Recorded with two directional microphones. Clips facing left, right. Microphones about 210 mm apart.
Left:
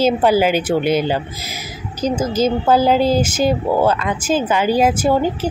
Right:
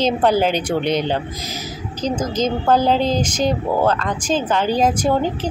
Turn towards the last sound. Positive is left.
turn(degrees=5)  # may be behind; listen again after turning